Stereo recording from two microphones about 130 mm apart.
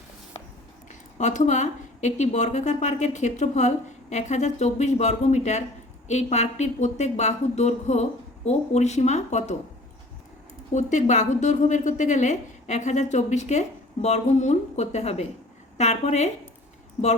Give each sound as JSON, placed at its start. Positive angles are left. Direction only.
{"t": 0.9, "sound": "a woman's voice", "side_deg": 65}
{"t": 10.8, "sound": "a woman's voice", "side_deg": 70}